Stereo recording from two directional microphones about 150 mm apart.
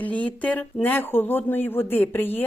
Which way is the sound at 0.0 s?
10° left (ahead or behind).